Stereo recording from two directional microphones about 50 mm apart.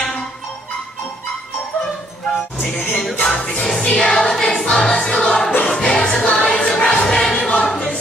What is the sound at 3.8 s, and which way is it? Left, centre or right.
Music, left.